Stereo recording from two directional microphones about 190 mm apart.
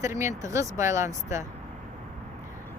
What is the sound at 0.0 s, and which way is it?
Speech, 15° right (ahead or behind).